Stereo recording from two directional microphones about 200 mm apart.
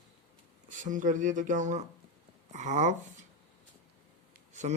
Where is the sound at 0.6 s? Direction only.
40° right (ahead or behind).